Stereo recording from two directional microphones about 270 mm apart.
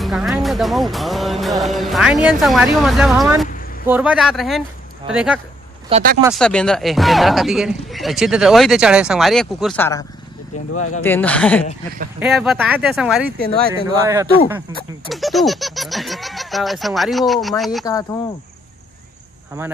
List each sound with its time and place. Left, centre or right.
0.0 s a man's voice: centre
5.9 s speech: right
6.2 s a man's voice: centre
17.8 s speech: centre